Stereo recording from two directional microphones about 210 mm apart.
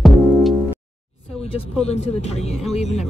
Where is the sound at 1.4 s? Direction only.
30° left (ahead or behind).